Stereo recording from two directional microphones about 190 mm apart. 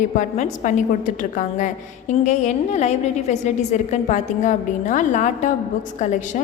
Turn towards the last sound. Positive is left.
turn(degrees=40)  # may be behind; listen again after turning